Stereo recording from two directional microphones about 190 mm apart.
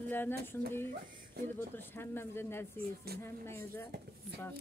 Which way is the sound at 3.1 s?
55° right (ahead or behind).